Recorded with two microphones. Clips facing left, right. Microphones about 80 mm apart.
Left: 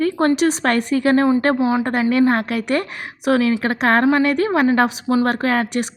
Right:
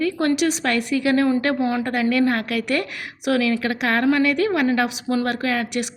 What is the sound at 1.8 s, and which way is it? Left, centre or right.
A woman's voice, left.